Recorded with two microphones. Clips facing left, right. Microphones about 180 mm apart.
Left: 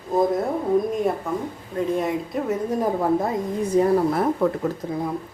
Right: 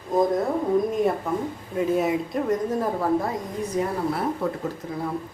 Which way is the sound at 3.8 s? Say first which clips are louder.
Left 7 dB; 30° left (ahead or behind).